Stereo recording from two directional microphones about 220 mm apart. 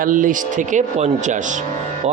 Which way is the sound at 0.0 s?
35° right (ahead or behind).